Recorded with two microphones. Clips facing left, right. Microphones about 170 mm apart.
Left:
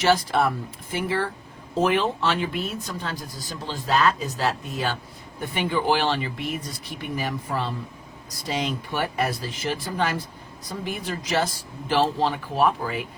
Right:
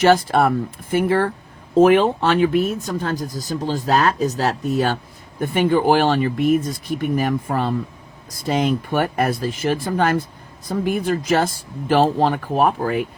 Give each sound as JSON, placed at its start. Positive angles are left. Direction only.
{"t": 0.0, "sound": "speech", "side_deg": -50}